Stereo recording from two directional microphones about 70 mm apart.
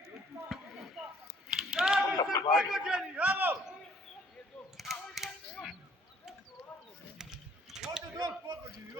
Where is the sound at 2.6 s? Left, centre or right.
Centre.